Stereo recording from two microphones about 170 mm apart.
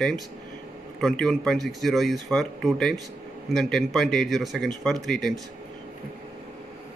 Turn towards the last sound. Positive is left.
turn(degrees=0)  # may be behind; listen again after turning